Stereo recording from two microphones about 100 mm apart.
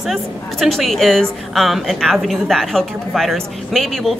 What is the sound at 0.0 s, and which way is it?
A woman's voice, centre (ahead or behind).